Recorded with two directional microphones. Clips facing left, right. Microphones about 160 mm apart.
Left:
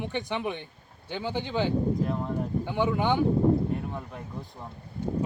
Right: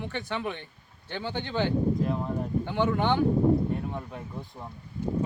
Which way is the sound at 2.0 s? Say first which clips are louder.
Even; centre (ahead or behind).